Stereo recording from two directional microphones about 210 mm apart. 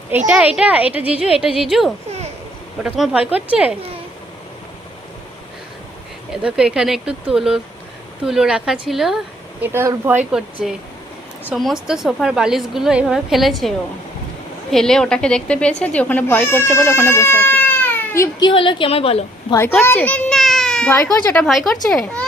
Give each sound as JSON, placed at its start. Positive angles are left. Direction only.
{"t": 0.3, "sound": "a woman's voice", "side_deg": -5}
{"t": 6.3, "sound": "a woman's voice", "side_deg": -5}
{"t": 19.7, "sound": "a child's voice", "side_deg": 10}
{"t": 21.4, "sound": "a woman's voice", "side_deg": 0}